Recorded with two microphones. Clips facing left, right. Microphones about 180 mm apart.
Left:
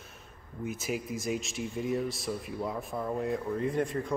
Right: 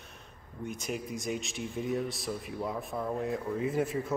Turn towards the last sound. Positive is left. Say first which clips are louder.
# even
turn(degrees=-5)  # may be behind; listen again after turning